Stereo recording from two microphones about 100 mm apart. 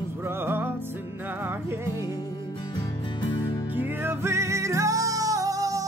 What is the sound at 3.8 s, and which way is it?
Music, 20° right (ahead or behind).